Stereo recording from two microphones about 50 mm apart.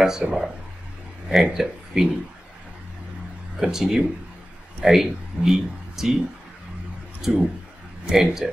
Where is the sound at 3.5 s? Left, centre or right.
Centre.